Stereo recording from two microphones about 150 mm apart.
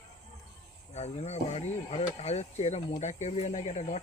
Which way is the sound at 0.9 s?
45° left (ahead or behind).